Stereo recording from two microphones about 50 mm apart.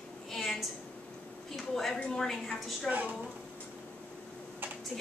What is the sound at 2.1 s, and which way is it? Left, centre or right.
Speech, centre.